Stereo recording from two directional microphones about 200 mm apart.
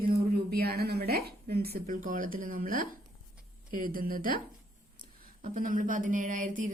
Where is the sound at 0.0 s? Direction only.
50° right (ahead or behind).